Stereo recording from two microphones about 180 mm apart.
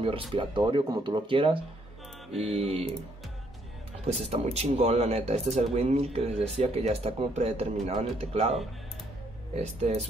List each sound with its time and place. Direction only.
0.0 s speech: 30° right (ahead or behind)
4.0 s speech: 35° right (ahead or behind)
9.6 s speech: 35° right (ahead or behind)